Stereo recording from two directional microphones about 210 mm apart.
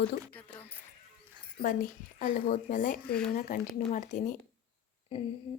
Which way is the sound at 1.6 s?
40° left (ahead or behind).